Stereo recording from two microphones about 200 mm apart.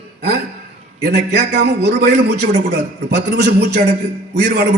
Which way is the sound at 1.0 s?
55° right (ahead or behind).